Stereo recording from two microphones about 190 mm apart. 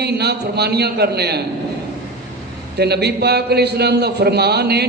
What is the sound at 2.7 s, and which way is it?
A man's voice, 60° right (ahead or behind).